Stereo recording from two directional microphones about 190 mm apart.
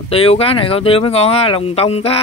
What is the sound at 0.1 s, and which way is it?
Speech, 30° left (ahead or behind).